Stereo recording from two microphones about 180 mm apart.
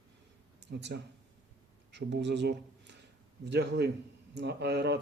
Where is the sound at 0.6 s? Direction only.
70° right (ahead or behind).